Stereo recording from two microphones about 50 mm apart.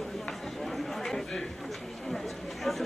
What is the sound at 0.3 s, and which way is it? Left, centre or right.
Chatter, centre.